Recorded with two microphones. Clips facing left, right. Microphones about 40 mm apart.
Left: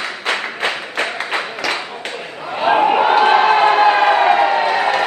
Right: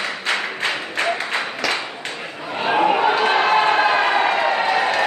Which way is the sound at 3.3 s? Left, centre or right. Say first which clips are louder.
Left 4 dB; centre.